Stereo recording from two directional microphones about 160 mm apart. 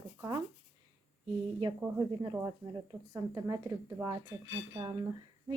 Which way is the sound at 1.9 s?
20° right (ahead or behind).